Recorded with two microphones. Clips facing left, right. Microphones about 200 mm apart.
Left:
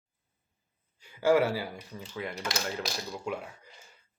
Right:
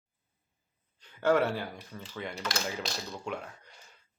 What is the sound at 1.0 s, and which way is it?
Speech, 10° left (ahead or behind).